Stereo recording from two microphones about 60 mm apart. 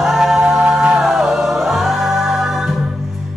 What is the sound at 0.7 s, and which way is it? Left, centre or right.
Music, centre.